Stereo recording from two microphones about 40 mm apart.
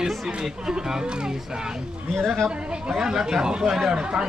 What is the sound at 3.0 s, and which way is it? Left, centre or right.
Speech, centre.